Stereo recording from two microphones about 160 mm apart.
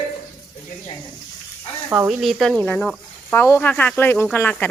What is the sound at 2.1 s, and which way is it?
Speech, centre (ahead or behind).